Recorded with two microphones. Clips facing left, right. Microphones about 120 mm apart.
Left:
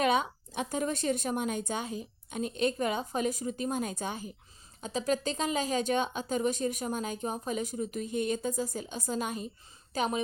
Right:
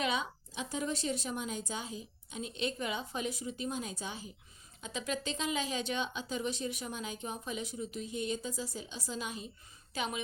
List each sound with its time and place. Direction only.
0.0 s speech: 55° left (ahead or behind)
4.8 s a woman's voice: 40° left (ahead or behind)